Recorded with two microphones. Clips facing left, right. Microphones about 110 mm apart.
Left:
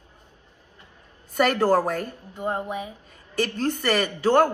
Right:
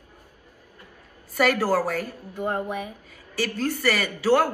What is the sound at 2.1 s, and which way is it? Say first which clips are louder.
Speech: right 1 dB; 15° left (ahead or behind).